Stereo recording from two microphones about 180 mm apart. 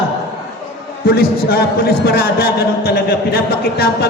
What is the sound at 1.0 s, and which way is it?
A man's voice, 55° left (ahead or behind).